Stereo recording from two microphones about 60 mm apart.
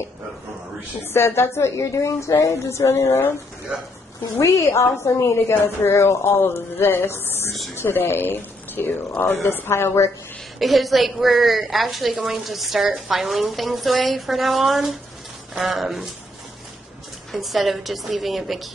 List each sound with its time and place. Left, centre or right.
1.0 s speech: left
1.8 s speech: left
3.7 s speech: centre
4.4 s speech: left
10.6 s a woman's voice: centre
17.3 s a woman's voice: centre